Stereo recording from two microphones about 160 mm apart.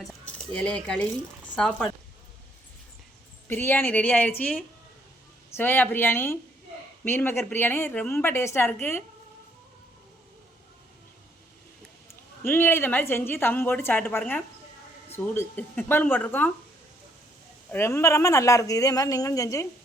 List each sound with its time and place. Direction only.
0.0 s speech: 5° left (ahead or behind)
3.5 s a woman's voice: 10° left (ahead or behind)
12.5 s a woman's voice: 15° left (ahead or behind)
17.7 s speech: 15° left (ahead or behind)